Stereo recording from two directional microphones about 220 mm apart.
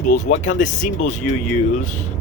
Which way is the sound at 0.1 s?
35° left (ahead or behind).